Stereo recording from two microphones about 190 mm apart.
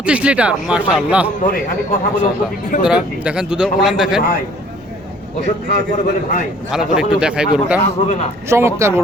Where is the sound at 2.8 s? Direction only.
5° right (ahead or behind).